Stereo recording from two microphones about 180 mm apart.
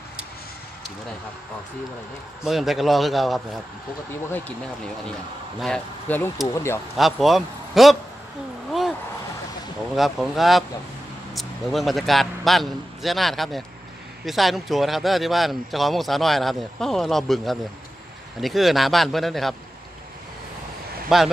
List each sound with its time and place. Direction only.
2.4 s speech: centre (ahead or behind)
5.6 s speech: 5° left (ahead or behind)
7.0 s speech: centre (ahead or behind)
9.9 s a man's voice: centre (ahead or behind)
21.1 s speech: 5° right (ahead or behind)